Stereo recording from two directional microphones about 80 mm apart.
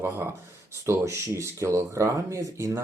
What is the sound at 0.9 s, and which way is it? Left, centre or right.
Speech, right.